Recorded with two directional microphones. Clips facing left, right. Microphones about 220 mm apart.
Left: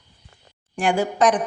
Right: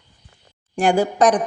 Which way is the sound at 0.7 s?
40° right (ahead or behind).